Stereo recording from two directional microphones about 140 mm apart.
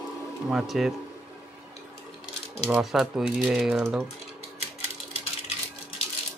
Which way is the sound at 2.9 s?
5° right (ahead or behind).